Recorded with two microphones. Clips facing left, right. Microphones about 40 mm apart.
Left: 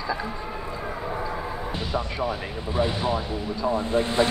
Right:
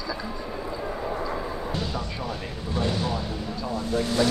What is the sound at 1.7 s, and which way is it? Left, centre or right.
Speech, left.